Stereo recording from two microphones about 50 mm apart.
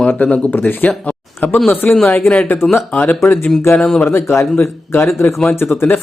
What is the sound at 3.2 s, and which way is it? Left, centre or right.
Speech, left.